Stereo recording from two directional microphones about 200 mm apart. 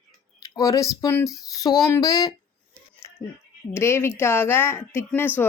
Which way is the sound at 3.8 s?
10° left (ahead or behind).